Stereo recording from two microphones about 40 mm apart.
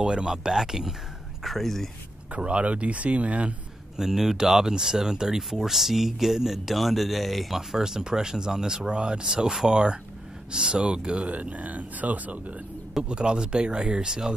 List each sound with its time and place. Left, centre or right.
0.0 s speech: centre
1.4 s speech: centre
2.3 s speech: right
3.9 s speech: centre; by 11.3 s right
11.3 s speech: right
13.1 s speech: right